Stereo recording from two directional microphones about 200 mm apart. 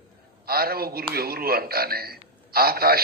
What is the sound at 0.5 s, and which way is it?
A man's voice, 50° right (ahead or behind).